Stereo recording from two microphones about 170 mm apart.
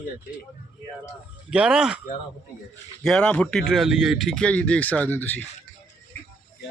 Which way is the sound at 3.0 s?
5° left (ahead or behind).